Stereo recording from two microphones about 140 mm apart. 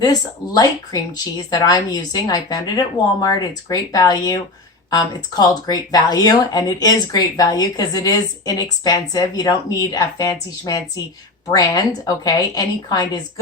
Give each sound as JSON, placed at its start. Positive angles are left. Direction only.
{"t": 0.0, "sound": "speech", "side_deg": 30}
{"t": 11.5, "sound": "speech", "side_deg": 25}